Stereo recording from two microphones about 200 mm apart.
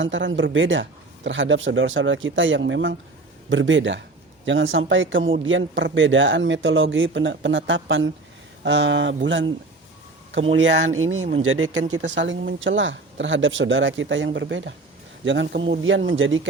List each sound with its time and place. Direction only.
0.0 s speech: 70° right (ahead or behind)
10.5 s speech: 80° right
11.5 s speech: 75° right (ahead or behind)